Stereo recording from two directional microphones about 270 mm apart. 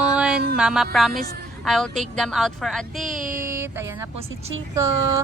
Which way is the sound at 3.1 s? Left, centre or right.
Right.